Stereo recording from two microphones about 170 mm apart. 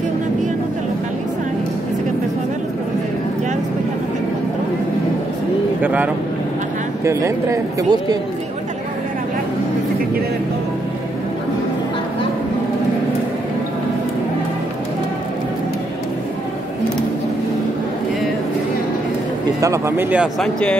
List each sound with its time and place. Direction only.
5.8 s speech: 10° right (ahead or behind)
7.1 s speech: 15° right (ahead or behind)
19.6 s speech: 15° right (ahead or behind)
20.3 s speech: 5° left (ahead or behind)